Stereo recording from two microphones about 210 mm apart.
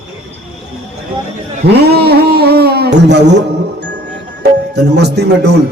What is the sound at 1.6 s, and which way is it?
A man's voice, 50° right (ahead or behind).